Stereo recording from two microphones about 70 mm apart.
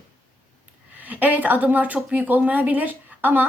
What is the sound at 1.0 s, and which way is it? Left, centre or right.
Speech, right.